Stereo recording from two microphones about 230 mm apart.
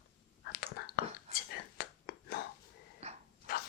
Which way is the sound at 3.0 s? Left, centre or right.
Right.